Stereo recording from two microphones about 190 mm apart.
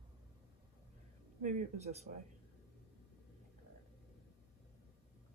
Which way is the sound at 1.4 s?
40° right (ahead or behind).